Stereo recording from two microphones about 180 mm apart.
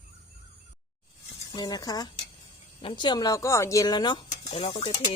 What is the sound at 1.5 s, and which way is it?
Speech, 25° left (ahead or behind).